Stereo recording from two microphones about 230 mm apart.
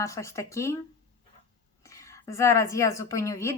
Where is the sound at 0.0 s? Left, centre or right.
Centre.